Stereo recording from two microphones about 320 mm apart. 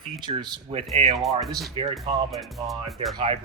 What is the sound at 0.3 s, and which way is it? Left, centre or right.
Speech, centre.